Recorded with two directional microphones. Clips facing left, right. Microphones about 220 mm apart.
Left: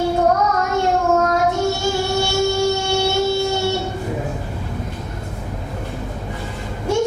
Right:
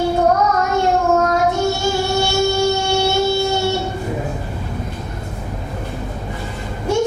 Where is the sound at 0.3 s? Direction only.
30° right (ahead or behind).